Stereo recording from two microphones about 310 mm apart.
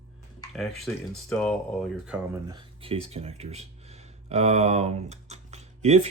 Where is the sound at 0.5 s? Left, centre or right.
Centre.